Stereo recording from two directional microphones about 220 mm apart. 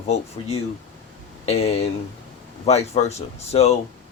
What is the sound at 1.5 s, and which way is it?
Speech, 30° left (ahead or behind).